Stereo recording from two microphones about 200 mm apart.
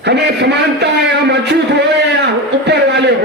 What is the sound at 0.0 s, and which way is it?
A man's voice, 60° right (ahead or behind).